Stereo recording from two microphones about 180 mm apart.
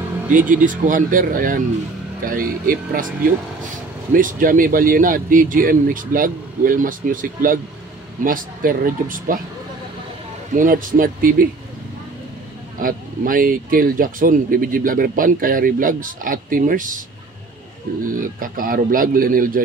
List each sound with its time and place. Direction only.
0.3 s speech: 45° right (ahead or behind)
4.1 s speech: 50° right (ahead or behind)
10.5 s speech: 50° right (ahead or behind)
12.8 s speech: 50° right (ahead or behind)
18.0 s speech: 50° right (ahead or behind)